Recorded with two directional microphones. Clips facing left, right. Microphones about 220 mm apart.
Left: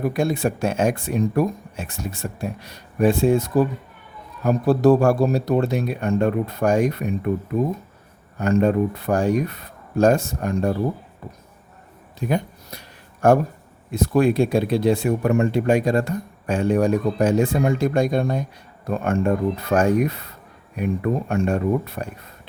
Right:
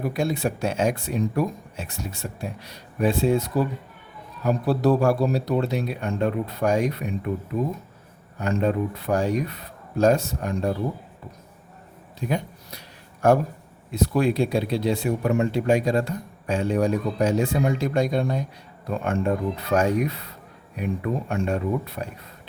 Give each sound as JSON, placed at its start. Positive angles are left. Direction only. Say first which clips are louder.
{"t": 0.1, "sound": "speech", "louder": "left 3 dB", "side_deg": 50}
{"t": 8.4, "sound": "speech", "louder": "left 5 dB", "side_deg": 45}
{"t": 13.2, "sound": "speech", "louder": "left 3 dB", "side_deg": 50}